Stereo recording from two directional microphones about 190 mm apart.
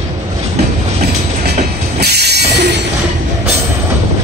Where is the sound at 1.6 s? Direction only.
60° right (ahead or behind).